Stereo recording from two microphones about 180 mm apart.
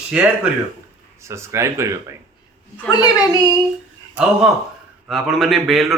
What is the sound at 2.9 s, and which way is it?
Speech, 20° left (ahead or behind).